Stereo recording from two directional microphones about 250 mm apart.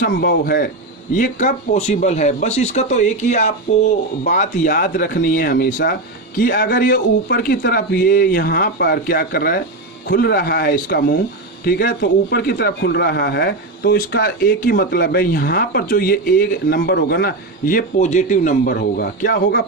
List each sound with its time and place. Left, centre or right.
0.0 s a man's voice: left